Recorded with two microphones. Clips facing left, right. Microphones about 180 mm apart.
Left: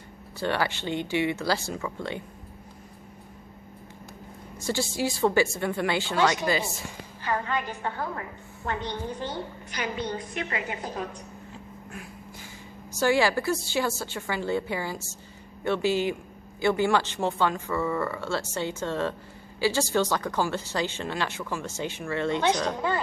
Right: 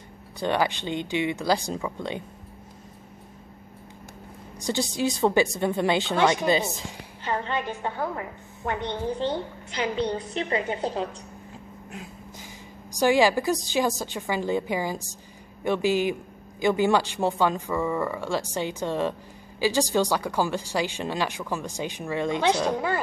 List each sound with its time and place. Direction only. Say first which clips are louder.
0.4 s speech: right 3 dB; 15° right (ahead or behind)
4.6 s a woman's voice: right 2 dB; 15° right (ahead or behind)
11.9 s snort: right 2 dB; 20° right (ahead or behind)
13.0 s speech: right 3 dB; 15° right (ahead or behind)